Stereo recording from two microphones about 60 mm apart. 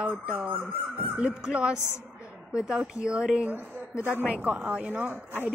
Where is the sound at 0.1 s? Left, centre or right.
Right.